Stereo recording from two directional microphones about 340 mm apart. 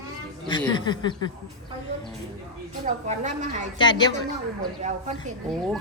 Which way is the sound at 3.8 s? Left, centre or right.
Centre.